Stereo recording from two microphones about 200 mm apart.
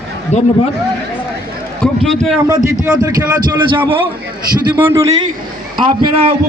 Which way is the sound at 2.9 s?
20° right (ahead or behind).